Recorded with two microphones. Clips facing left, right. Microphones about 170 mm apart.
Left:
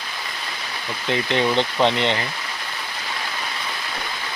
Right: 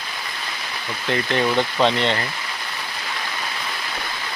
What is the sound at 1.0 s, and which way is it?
Speech, 15° left (ahead or behind).